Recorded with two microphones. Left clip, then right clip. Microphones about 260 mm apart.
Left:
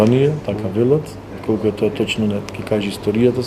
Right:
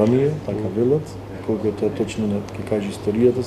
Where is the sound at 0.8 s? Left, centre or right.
Left.